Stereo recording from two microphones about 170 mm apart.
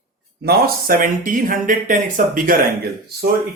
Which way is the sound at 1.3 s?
50° right (ahead or behind).